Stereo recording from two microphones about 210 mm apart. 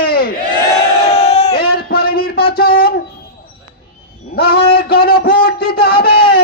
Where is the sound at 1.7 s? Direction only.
45° left (ahead or behind).